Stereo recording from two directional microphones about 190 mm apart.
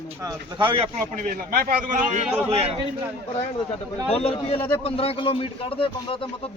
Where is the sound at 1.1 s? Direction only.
45° right (ahead or behind).